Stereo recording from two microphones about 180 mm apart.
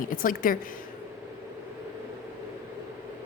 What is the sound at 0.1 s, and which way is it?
Speech, 50° left (ahead or behind).